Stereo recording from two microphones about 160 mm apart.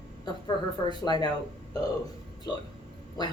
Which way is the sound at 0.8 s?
25° left (ahead or behind).